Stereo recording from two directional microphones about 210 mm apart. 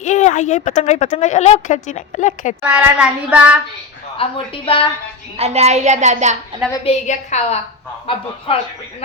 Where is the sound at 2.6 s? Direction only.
5° right (ahead or behind).